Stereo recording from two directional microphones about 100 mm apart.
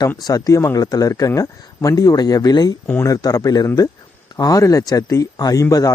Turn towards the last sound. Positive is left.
turn(degrees=35)  # may be behind; listen again after turning